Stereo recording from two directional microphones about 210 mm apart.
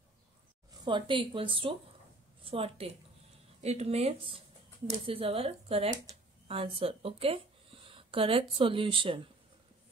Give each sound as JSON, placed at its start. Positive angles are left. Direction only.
{"t": 0.8, "sound": "a woman's voice", "side_deg": -25}
{"t": 6.1, "sound": "a sound", "side_deg": -15}
{"t": 6.4, "sound": "speech", "side_deg": -25}